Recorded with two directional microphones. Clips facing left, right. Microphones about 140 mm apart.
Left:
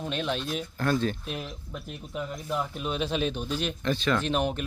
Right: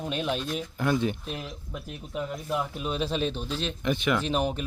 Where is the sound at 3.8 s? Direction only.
15° right (ahead or behind).